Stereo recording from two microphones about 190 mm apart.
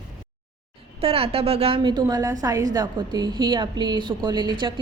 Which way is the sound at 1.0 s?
30° right (ahead or behind).